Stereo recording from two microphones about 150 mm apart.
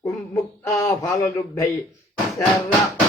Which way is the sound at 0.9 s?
20° left (ahead or behind).